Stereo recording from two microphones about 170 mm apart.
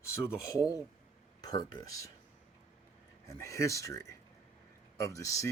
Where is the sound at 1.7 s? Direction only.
20° left (ahead or behind).